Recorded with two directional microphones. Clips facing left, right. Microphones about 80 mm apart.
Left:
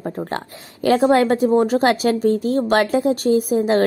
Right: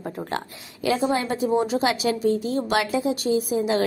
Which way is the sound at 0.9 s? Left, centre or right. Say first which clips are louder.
Left 9 dB; left.